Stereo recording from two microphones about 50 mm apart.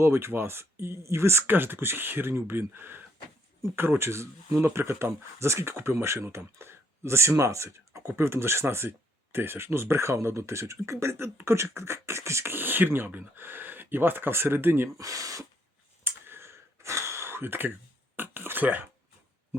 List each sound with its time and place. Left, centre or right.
0.0 s speech: right
1.5 s speech: right
5.7 s speech: right
8.0 s speech: right
12.5 s speech: right
16.0 s a sound: right
18.2 s speech: right